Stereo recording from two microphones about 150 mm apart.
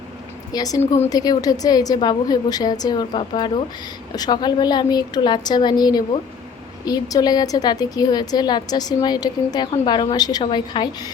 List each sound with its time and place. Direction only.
0.5 s a woman's voice: 25° left (ahead or behind)